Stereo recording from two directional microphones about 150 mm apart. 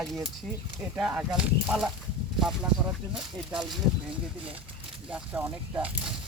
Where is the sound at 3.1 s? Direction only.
5° right (ahead or behind).